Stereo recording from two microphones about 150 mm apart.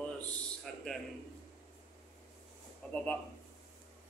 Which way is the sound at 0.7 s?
Centre (ahead or behind).